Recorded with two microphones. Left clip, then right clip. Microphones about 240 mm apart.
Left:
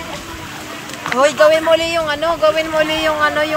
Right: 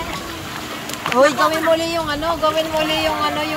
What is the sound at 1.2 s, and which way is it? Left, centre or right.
Speech, centre.